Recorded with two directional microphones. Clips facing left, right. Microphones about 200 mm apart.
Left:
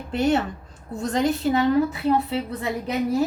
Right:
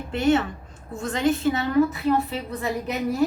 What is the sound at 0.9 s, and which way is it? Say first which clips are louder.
Speech: left 1 dB; 40° left (ahead or behind).